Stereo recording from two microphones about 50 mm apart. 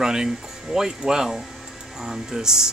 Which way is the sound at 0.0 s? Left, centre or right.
Centre.